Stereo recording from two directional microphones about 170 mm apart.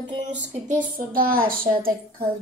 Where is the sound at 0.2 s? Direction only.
45° right (ahead or behind).